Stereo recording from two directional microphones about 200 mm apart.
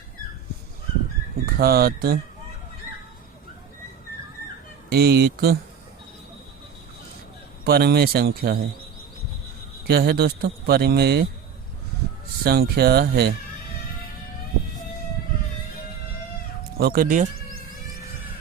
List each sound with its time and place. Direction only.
1.5 s a man's voice: 50° right (ahead or behind)
4.9 s a man's voice: 50° right (ahead or behind)
7.6 s a man's voice: 50° right (ahead or behind)
9.8 s a man's voice: 50° right (ahead or behind)
12.5 s a man's voice: 50° right (ahead or behind)
16.7 s speech: 50° right (ahead or behind)